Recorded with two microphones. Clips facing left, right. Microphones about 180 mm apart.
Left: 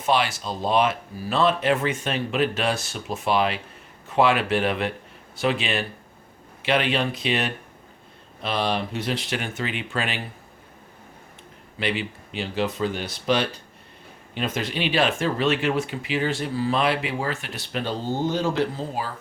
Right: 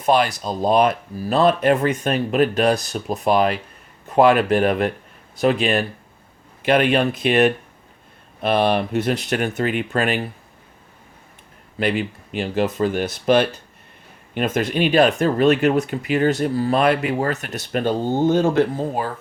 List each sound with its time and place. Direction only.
0.0 s speech: 40° right (ahead or behind)
11.8 s speech: 45° right (ahead or behind)